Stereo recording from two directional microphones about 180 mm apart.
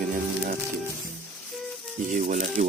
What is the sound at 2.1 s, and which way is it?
Speech, 45° right (ahead or behind).